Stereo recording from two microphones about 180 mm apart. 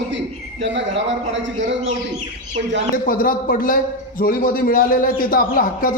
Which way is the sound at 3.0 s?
50° left (ahead or behind).